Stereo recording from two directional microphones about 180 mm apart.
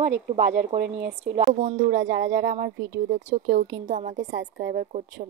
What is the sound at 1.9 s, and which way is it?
Speech, 90° right.